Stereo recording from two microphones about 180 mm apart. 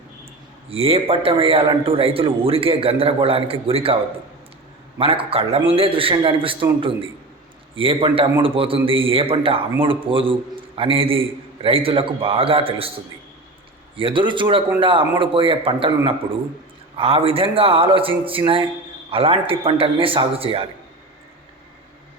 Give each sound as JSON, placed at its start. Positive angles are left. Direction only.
{"t": 0.7, "sound": "a man's voice", "side_deg": -30}
{"t": 4.9, "sound": "a man's voice", "side_deg": -30}
{"t": 7.8, "sound": "a man's voice", "side_deg": -30}
{"t": 13.9, "sound": "speech", "side_deg": -30}
{"t": 17.0, "sound": "a man's voice", "side_deg": -30}